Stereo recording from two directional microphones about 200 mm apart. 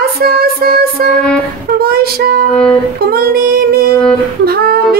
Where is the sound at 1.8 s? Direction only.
50° right (ahead or behind).